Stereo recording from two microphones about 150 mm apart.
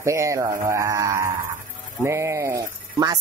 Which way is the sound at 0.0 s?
20° right (ahead or behind).